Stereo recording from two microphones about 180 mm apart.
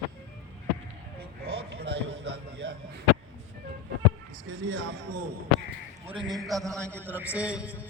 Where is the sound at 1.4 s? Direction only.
65° right (ahead or behind).